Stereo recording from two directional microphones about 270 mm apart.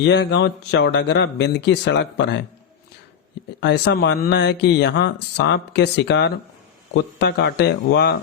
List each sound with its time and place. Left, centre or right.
0.0 s speech: left
3.6 s speech: left